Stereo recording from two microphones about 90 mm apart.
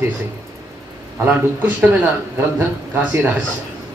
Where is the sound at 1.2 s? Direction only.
20° right (ahead or behind).